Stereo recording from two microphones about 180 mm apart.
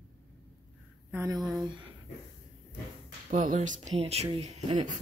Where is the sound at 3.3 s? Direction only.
45° right (ahead or behind).